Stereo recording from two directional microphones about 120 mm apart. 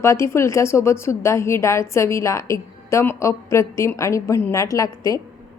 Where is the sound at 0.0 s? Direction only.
25° left (ahead or behind).